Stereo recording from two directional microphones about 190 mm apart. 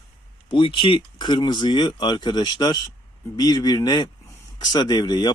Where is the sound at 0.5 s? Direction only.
25° left (ahead or behind).